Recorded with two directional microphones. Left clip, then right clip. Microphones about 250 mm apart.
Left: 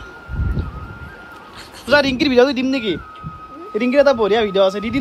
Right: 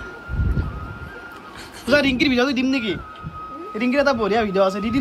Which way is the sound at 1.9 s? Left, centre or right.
Centre.